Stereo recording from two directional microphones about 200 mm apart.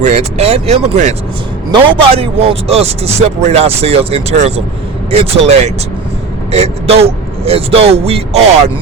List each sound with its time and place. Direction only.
0.0 s speech: 35° right (ahead or behind)